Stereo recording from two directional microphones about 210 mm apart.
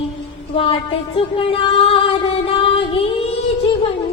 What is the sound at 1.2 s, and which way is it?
Music, 25° left (ahead or behind).